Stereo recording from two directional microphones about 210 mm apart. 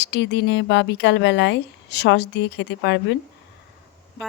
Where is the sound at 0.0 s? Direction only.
55° left (ahead or behind).